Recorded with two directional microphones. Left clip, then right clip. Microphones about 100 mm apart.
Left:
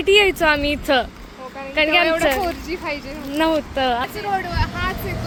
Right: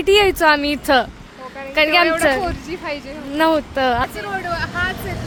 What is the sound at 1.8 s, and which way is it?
Speech, 65° right (ahead or behind).